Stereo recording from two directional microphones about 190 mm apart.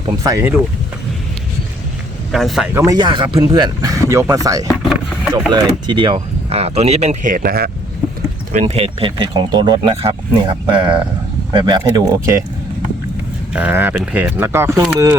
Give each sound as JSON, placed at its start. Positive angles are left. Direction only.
{"t": 0.2, "sound": "speech", "side_deg": -15}
{"t": 2.3, "sound": "speech", "side_deg": 0}
{"t": 2.7, "sound": "speech", "side_deg": -20}
{"t": 4.7, "sound": "vehicle", "side_deg": 0}
{"t": 5.5, "sound": "speech", "side_deg": -25}
{"t": 8.5, "sound": "speech", "side_deg": -35}
{"t": 13.5, "sound": "speech", "side_deg": -10}